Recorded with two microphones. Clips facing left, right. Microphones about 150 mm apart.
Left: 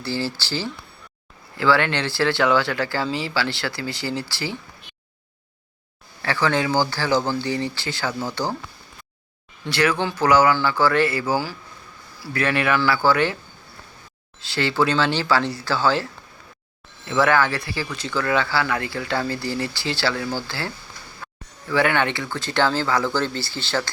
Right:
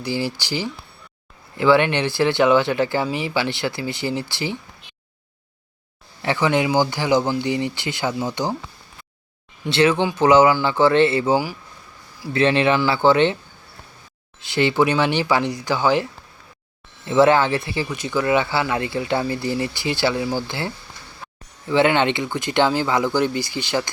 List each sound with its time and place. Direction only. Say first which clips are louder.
0.0 s speech: right 2 dB; 15° right (ahead or behind)
6.2 s speech: right 2 dB; 20° right (ahead or behind)
9.6 s speech: right 4 dB; 25° right (ahead or behind)
14.4 s speech: right 3 dB; 20° right (ahead or behind)
17.1 s speech: right 4 dB; 25° right (ahead or behind)